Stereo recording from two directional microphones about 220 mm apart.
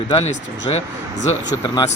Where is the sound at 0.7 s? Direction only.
25° left (ahead or behind).